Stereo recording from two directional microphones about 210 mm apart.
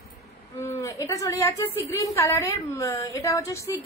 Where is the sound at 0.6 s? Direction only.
15° left (ahead or behind).